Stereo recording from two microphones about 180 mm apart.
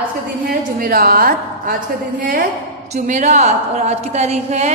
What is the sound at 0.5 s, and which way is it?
A woman's voice, 55° right (ahead or behind).